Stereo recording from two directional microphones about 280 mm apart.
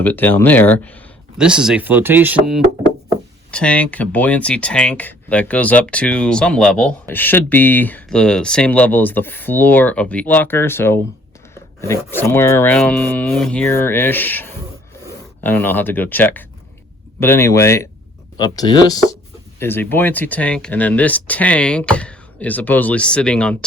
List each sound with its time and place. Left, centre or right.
0.0 s speech: centre
3.5 s speech: centre